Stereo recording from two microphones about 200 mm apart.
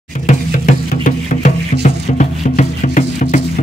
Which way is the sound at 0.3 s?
40° left (ahead or behind).